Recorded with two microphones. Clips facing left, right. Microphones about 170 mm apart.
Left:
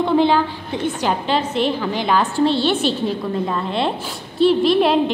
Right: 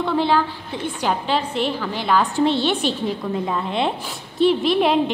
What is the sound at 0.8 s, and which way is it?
A woman's voice, 10° right (ahead or behind).